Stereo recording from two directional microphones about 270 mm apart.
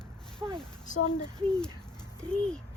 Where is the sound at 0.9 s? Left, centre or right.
Left.